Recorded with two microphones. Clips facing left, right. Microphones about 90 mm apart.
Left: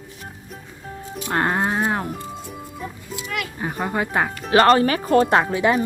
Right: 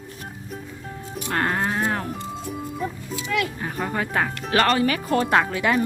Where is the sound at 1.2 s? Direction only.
20° left (ahead or behind).